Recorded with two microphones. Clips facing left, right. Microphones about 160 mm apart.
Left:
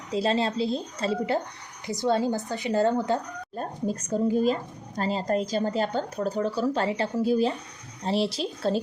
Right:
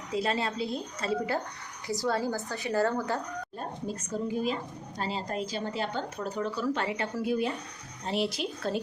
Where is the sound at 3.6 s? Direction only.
40° left (ahead or behind).